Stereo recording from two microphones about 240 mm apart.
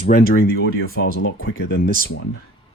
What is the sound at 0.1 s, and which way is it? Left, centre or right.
Speech, left.